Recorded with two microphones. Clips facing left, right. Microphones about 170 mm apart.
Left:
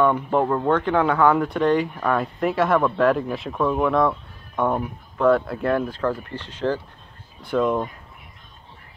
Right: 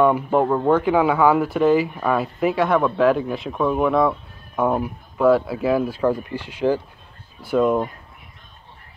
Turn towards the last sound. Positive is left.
turn(degrees=-5)  # may be behind; listen again after turning